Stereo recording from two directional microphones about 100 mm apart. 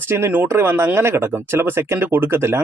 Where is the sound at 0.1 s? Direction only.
20° right (ahead or behind).